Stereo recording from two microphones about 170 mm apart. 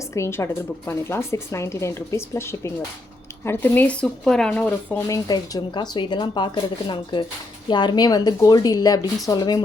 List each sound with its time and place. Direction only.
0.1 s speech: 15° left (ahead or behind)
5.0 s speech: 20° left (ahead or behind)